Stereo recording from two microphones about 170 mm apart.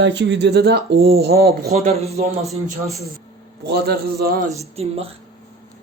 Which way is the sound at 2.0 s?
40° right (ahead or behind).